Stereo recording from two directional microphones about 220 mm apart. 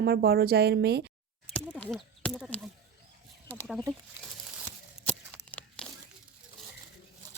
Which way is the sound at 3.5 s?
5° left (ahead or behind).